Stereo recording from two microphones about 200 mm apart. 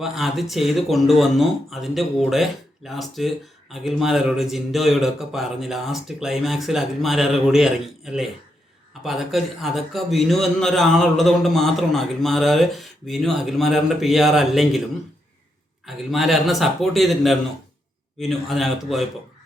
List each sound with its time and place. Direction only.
0.0 s speech: centre (ahead or behind)
16.1 s speech: centre (ahead or behind)